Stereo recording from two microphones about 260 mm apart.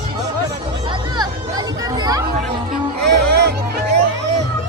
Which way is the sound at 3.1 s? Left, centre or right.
Right.